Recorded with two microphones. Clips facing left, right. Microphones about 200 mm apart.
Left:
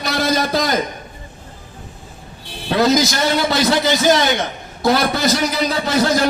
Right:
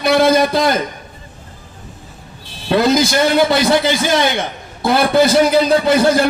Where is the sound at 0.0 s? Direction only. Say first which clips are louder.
Right 7 dB; 55° right (ahead or behind).